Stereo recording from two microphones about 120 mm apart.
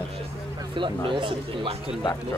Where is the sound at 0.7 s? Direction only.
45° right (ahead or behind).